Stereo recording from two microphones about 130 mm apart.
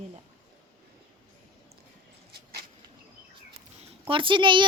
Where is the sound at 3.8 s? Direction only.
45° right (ahead or behind).